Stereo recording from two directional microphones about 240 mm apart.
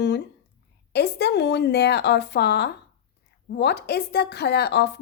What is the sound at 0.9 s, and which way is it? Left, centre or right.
A woman's voice, left.